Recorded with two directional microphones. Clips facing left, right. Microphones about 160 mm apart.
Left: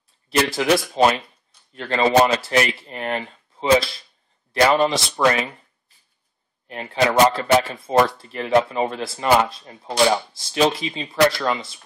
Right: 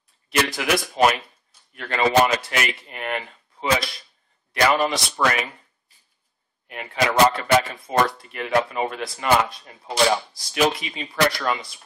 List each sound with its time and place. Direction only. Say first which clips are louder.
0.3 s a man's voice: left 4 dB; 30° left (ahead or behind)
6.7 s speech: left 3 dB; 30° left (ahead or behind)
9.8 s speech: left 2 dB; centre (ahead or behind)
10.4 s speech: left 3 dB; 30° left (ahead or behind)